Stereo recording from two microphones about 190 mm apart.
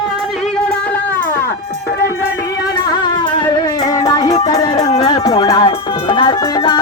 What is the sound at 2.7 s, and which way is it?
Music, 20° left (ahead or behind).